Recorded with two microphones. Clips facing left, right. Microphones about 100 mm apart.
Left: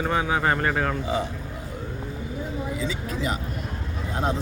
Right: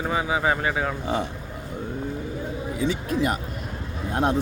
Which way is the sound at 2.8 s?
55° right (ahead or behind).